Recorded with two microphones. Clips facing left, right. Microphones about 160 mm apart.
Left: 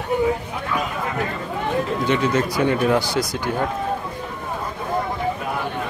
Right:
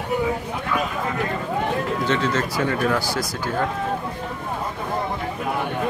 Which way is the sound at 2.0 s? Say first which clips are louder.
Left 3 dB; 15° left (ahead or behind).